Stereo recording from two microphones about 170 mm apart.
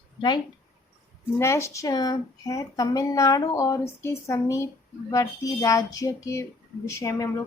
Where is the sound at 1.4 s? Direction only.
15° left (ahead or behind).